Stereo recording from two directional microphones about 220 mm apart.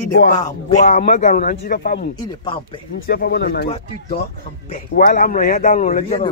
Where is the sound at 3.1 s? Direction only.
45° left (ahead or behind).